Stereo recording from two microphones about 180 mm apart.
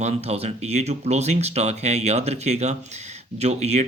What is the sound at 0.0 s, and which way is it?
Speech, 35° right (ahead or behind).